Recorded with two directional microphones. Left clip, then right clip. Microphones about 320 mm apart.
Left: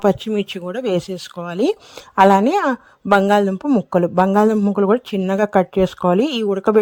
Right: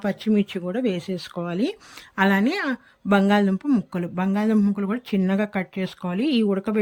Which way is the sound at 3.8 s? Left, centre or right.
Left.